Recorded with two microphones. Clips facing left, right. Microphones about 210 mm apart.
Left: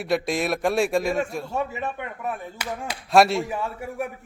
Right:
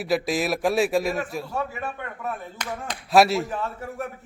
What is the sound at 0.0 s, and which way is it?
A man's voice, centre (ahead or behind).